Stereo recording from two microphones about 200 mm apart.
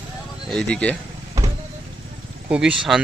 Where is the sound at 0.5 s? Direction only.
5° left (ahead or behind).